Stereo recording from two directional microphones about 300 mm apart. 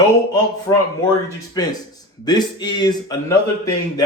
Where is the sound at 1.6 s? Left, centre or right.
Centre.